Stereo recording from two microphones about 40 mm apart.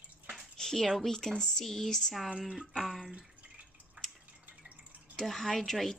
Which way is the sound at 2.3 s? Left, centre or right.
Centre.